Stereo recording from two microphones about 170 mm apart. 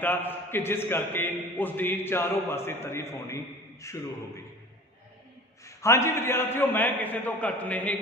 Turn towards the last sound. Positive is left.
turn(degrees=10)  # may be behind; listen again after turning